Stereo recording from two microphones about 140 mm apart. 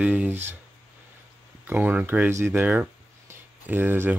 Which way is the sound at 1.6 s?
10° right (ahead or behind).